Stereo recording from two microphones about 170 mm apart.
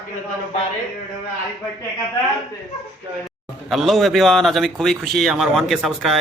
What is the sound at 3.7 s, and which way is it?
A man's voice, centre (ahead or behind).